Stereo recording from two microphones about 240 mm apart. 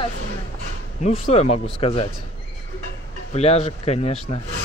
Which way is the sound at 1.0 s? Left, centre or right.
Left.